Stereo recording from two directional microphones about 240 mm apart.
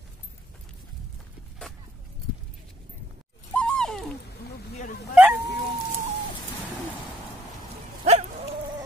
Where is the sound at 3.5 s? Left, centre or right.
Centre.